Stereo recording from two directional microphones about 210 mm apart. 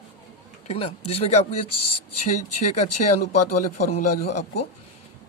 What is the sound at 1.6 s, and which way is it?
Speech, 90° left.